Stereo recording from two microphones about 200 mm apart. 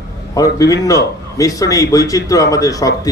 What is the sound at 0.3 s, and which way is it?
A man's voice, 15° left (ahead or behind).